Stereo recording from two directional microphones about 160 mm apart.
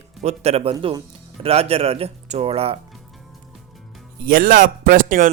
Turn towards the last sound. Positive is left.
turn(degrees=-55)  # may be behind; listen again after turning